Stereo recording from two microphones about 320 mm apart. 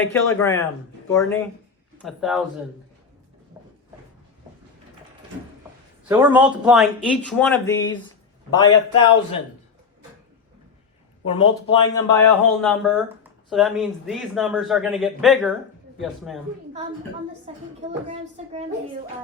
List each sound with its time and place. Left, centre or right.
0.0 s speech: centre
3.6 s a sound: centre
6.1 s speech: centre
11.3 s speech: centre
17.5 s a woman's voice: centre